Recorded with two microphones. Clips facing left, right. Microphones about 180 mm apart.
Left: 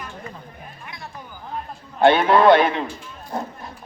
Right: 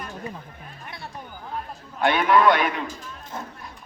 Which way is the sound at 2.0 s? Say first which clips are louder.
Left 4 dB; 30° left (ahead or behind).